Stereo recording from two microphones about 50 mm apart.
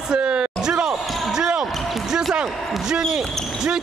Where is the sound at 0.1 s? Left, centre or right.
Right.